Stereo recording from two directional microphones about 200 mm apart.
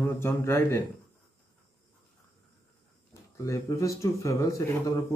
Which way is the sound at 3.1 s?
15° left (ahead or behind).